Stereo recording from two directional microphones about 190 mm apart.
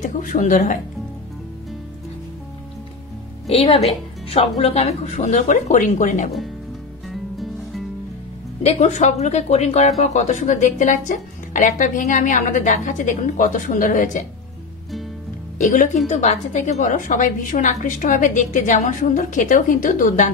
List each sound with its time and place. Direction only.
0.0 s speech: 40° left (ahead or behind)
3.4 s a woman's voice: 30° left (ahead or behind)
7.1 s music: centre (ahead or behind)
8.6 s a woman's voice: 40° left (ahead or behind)
15.5 s a woman's voice: 40° left (ahead or behind)